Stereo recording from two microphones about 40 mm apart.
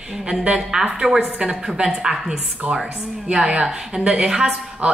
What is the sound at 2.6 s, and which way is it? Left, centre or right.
Speech, right.